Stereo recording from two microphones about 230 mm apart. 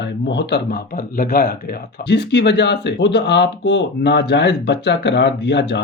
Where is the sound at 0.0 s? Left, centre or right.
Left.